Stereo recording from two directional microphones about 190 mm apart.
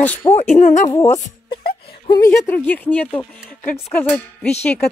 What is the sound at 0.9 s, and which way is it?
Speech, 20° left (ahead or behind).